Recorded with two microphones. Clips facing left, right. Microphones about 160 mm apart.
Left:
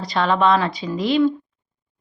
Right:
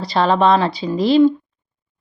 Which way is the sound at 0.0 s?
35° right (ahead or behind).